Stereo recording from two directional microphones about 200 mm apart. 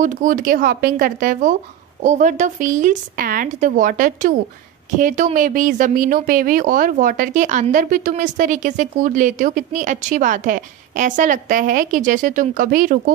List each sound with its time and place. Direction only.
0.0 s speech: 40° right (ahead or behind)